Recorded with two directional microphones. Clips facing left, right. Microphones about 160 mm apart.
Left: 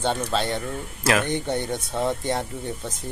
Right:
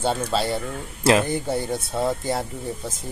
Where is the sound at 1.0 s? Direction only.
30° right (ahead or behind).